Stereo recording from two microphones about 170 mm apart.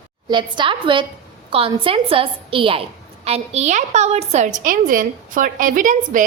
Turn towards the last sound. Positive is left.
turn(degrees=-50)  # may be behind; listen again after turning